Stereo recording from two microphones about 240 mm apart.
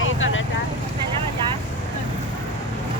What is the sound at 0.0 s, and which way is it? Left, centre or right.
Vehicle, left.